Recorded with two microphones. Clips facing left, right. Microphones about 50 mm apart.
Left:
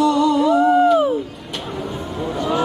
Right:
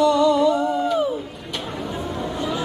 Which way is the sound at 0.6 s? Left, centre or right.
Left.